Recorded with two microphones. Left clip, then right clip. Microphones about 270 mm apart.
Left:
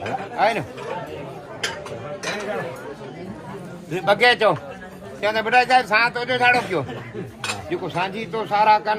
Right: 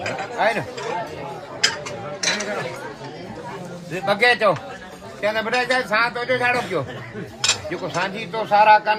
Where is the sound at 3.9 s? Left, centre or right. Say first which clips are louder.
Left 1 dB; centre.